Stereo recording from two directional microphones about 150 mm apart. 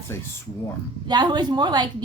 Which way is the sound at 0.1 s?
15° left (ahead or behind).